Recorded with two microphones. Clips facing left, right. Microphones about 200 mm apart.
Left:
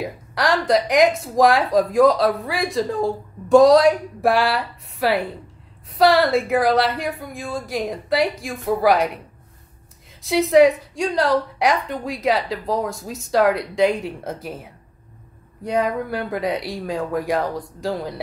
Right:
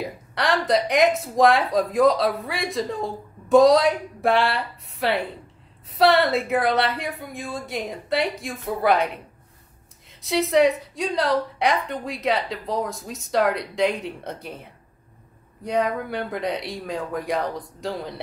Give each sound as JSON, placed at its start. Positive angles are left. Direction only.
{"t": 0.0, "sound": "speech", "side_deg": 0}
{"t": 10.2, "sound": "speech", "side_deg": 0}